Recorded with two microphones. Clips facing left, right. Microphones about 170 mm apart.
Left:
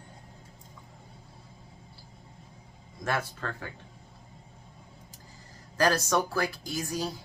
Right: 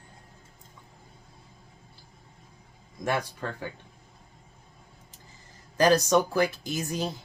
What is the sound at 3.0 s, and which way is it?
Speech, 15° right (ahead or behind).